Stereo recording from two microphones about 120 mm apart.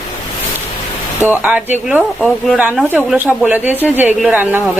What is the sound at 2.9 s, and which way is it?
Speech, 15° right (ahead or behind).